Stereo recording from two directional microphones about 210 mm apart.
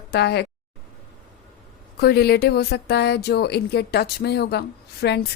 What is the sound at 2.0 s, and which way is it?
Speech, 50° left (ahead or behind).